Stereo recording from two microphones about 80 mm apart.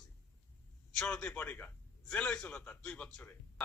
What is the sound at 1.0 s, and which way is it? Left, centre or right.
A man's voice, centre.